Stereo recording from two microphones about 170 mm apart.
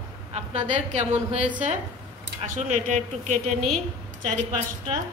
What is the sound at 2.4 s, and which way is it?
Speech, 45° right (ahead or behind).